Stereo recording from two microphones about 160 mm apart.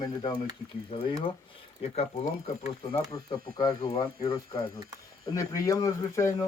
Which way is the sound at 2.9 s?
25° left (ahead or behind).